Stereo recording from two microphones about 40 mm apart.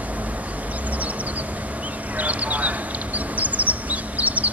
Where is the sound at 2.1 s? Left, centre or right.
Right.